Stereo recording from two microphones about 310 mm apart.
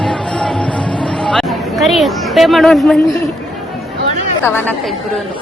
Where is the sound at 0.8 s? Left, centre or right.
Centre.